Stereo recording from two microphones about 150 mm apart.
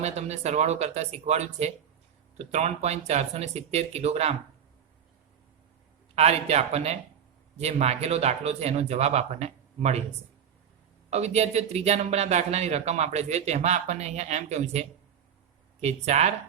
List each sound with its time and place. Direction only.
0.0 s speech: 45° right (ahead or behind)
6.1 s speech: 45° right (ahead or behind)
11.1 s speech: 45° right (ahead or behind)